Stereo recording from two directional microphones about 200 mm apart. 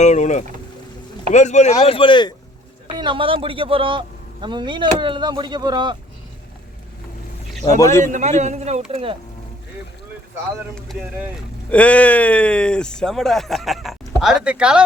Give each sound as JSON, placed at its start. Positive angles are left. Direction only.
{"t": 0.0, "sound": "speech", "side_deg": 35}
{"t": 2.8, "sound": "a man's voice", "side_deg": -25}
{"t": 7.8, "sound": "a man's voice", "side_deg": 15}
{"t": 8.0, "sound": "a man's voice", "side_deg": -35}
{"t": 10.8, "sound": "speech", "side_deg": 0}